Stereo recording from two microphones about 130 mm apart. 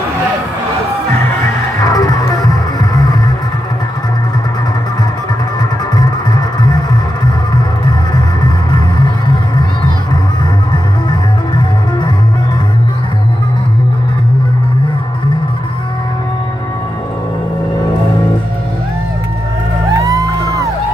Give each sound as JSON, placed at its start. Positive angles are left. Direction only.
{"t": 1.8, "sound": "music", "side_deg": 30}
{"t": 8.7, "sound": "music", "side_deg": 35}
{"t": 10.7, "sound": "music", "side_deg": 35}
{"t": 20.0, "sound": "music", "side_deg": -25}